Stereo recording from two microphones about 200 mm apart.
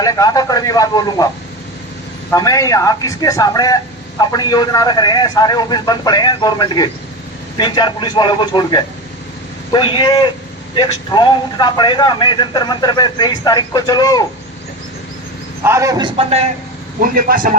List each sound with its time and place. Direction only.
0.0 s a man's voice: 20° left (ahead or behind)
2.3 s a man's voice: 15° left (ahead or behind)
15.6 s a man's voice: 15° right (ahead or behind)
16.1 s speech: 30° right (ahead or behind)
17.0 s a man's voice: 45° right (ahead or behind)